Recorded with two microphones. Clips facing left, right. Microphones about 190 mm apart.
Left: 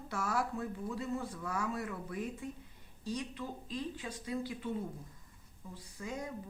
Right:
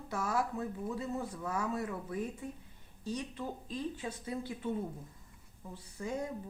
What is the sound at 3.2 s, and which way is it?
Speech, 25° right (ahead or behind).